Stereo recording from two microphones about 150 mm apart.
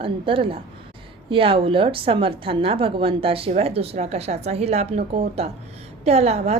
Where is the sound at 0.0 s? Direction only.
35° right (ahead or behind).